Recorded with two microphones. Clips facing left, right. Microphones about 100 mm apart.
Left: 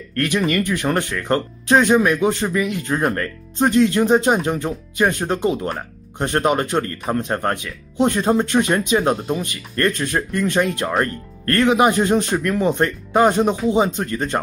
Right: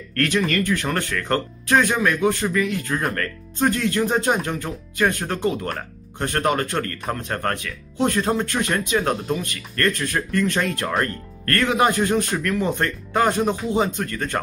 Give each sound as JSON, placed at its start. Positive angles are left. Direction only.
{"t": 0.1, "sound": "speech", "side_deg": 15}